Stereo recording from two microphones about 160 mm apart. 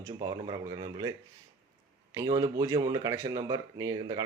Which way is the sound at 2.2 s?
25° right (ahead or behind).